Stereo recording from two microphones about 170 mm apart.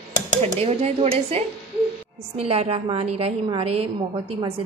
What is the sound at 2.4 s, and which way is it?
Speech, 35° right (ahead or behind).